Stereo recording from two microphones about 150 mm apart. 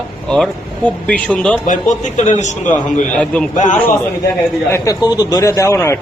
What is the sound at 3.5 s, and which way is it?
Speech, 55° left (ahead or behind).